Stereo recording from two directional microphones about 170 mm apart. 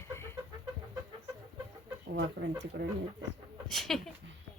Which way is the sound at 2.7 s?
75° right (ahead or behind).